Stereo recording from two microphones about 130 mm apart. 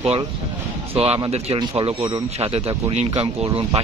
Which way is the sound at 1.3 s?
50° right (ahead or behind).